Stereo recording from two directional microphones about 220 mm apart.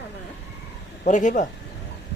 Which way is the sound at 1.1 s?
35° left (ahead or behind).